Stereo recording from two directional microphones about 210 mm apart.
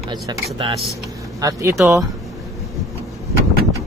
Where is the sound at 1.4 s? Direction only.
15° right (ahead or behind).